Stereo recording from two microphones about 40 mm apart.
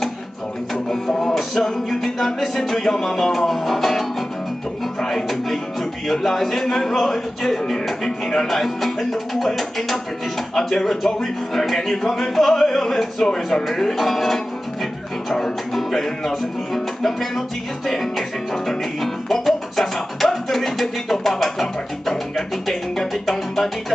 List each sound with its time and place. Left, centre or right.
0.8 s speech: centre
13.7 s music: centre
15.3 s speech: centre
17.8 s music: centre